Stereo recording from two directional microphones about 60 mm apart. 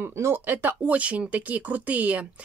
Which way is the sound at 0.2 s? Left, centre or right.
Right.